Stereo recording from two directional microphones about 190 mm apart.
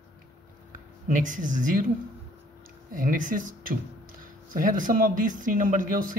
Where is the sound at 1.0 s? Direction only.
45° right (ahead or behind).